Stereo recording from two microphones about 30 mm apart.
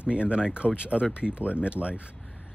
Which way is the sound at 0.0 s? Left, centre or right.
Right.